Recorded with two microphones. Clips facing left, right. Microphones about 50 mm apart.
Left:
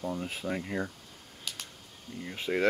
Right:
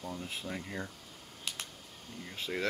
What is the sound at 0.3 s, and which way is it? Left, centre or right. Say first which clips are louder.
Speech: left 6 dB; left.